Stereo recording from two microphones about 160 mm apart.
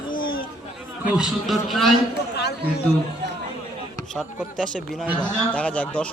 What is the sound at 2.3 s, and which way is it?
Chatter, 90° left.